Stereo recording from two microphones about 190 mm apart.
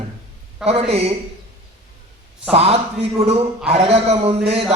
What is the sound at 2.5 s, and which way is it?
Speech, 30° right (ahead or behind).